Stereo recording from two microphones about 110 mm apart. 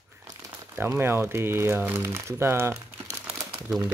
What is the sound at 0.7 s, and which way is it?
Speech, 20° right (ahead or behind).